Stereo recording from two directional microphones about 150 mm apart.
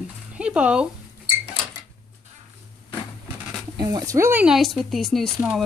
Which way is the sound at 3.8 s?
25° right (ahead or behind).